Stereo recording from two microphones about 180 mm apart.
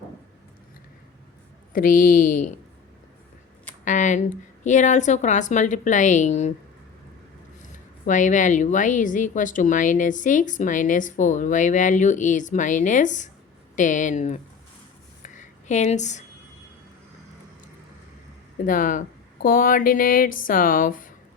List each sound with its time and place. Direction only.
1.7 s a woman's voice: 50° left (ahead or behind)
3.8 s a woman's voice: 45° left (ahead or behind)
7.6 s a woman's voice: 45° left (ahead or behind)
15.2 s a sound: 45° left (ahead or behind)
18.6 s a woman's voice: 50° left (ahead or behind)